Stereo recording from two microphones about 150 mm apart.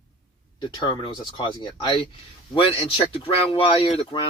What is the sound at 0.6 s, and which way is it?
Speech, 30° left (ahead or behind).